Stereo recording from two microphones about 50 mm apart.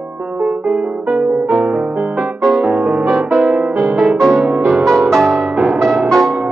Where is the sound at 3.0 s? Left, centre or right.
Centre.